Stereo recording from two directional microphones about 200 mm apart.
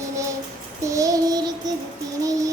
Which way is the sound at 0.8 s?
15° right (ahead or behind).